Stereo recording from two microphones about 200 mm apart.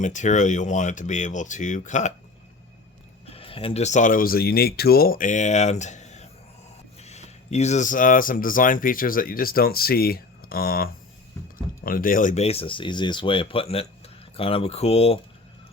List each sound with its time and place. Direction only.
0.0 s speech: 35° left (ahead or behind)
3.2 s speech: 30° left (ahead or behind)